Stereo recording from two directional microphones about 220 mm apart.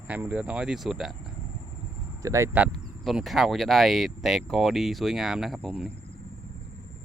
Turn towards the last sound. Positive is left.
turn(degrees=0)  # may be behind; listen again after turning